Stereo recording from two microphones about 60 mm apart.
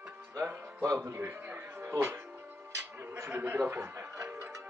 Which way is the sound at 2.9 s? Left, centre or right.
Right.